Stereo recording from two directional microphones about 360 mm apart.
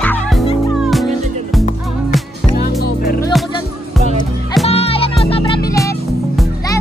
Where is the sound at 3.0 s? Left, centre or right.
Left.